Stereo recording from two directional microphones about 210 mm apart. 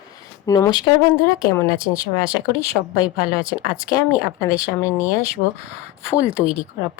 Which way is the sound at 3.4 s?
25° right (ahead or behind).